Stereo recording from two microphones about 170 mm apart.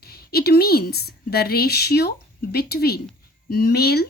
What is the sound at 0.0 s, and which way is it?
A woman's voice, 65° left (ahead or behind).